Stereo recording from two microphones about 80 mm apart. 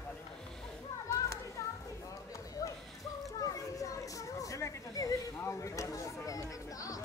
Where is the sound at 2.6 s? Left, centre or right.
Left.